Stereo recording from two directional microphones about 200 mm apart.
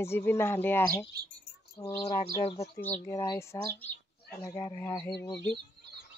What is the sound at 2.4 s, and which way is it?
Speech, 30° left (ahead or behind).